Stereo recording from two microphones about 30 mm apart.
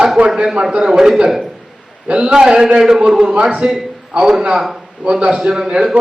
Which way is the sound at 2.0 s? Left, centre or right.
Right.